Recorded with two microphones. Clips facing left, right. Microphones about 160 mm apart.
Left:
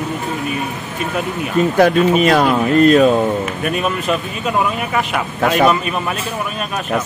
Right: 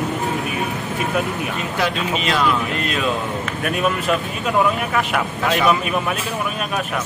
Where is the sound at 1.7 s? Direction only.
50° left (ahead or behind).